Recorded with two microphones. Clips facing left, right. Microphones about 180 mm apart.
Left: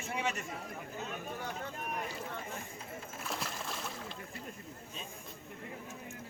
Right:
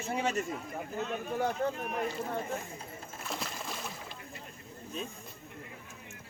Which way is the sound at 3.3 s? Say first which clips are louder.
Right 2 dB; centre (ahead or behind).